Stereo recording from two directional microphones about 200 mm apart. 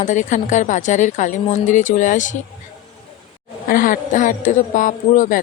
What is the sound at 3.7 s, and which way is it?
Speech, 45° left (ahead or behind).